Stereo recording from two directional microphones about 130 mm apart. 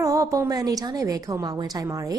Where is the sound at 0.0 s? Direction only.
25° right (ahead or behind).